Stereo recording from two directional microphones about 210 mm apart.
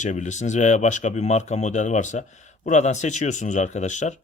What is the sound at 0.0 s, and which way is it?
A man's voice, 35° left (ahead or behind).